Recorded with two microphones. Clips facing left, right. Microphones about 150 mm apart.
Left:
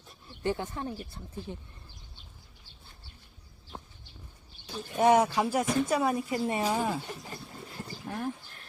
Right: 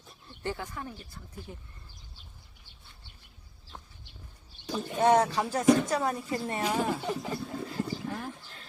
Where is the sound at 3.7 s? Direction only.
25° left (ahead or behind).